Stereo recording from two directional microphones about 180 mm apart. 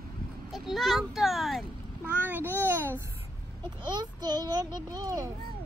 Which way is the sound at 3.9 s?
25° right (ahead or behind).